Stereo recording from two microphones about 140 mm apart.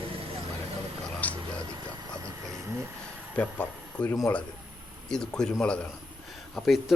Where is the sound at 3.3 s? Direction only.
10° left (ahead or behind).